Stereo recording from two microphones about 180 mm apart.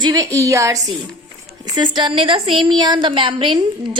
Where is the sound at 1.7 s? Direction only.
25° right (ahead or behind).